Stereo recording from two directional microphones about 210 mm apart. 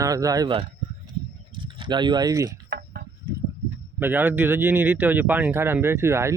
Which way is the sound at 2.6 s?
45° right (ahead or behind).